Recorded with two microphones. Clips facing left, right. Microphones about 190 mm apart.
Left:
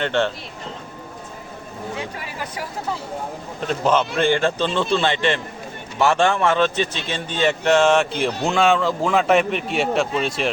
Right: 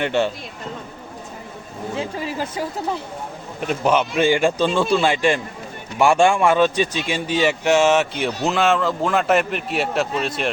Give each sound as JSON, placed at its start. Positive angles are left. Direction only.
{"t": 0.0, "sound": "a man's voice", "side_deg": -10}
{"t": 2.0, "sound": "speech", "side_deg": -25}
{"t": 3.7, "sound": "a man's voice", "side_deg": -10}